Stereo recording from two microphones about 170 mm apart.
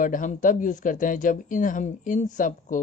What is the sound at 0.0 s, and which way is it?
Speech, 50° left (ahead or behind).